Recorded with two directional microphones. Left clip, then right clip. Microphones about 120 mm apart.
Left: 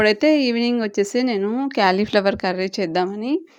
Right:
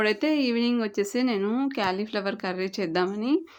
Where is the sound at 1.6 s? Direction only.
55° left (ahead or behind).